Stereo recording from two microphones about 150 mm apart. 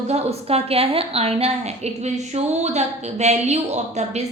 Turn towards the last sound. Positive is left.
turn(degrees=-50)  # may be behind; listen again after turning